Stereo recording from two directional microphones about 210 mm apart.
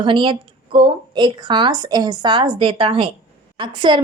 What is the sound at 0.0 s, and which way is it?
A woman's voice, 25° right (ahead or behind).